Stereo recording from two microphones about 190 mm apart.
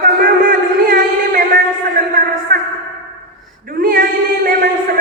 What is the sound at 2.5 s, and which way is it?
A man's voice, 45° right (ahead or behind).